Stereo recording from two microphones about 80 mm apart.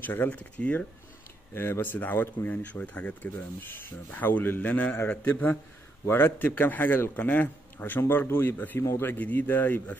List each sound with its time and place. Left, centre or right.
0.0 s speech: left
1.5 s speech: left